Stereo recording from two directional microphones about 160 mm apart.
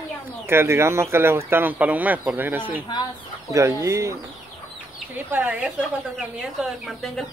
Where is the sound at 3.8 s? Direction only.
20° right (ahead or behind).